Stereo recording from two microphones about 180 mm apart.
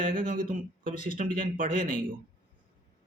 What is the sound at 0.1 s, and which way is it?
Speech, 50° right (ahead or behind).